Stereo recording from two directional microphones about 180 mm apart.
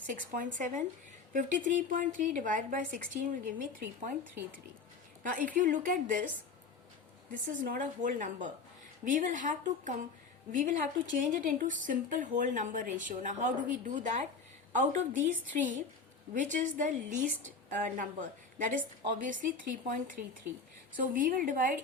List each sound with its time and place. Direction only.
0.0 s speech: 45° right (ahead or behind)
5.2 s speech: 50° right (ahead or behind)
7.4 s a woman's voice: 50° right (ahead or behind)